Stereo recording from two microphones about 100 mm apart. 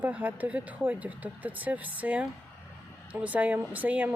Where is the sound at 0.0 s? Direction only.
15° right (ahead or behind).